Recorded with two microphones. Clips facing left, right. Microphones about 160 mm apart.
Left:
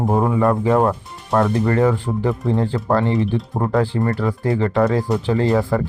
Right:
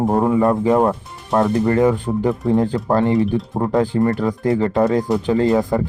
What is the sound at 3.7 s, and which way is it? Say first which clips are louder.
Speech: right 3 dB; 15° right (ahead or behind).